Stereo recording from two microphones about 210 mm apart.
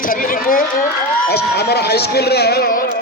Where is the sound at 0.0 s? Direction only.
40° left (ahead or behind).